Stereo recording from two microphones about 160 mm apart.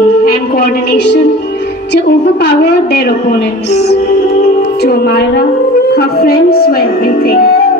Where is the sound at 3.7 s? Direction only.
90° left.